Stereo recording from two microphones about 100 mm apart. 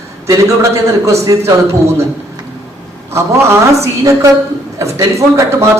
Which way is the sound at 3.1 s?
25° right (ahead or behind).